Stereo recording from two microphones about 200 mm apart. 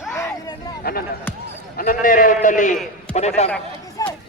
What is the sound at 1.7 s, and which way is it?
A man's voice, 45° left (ahead or behind).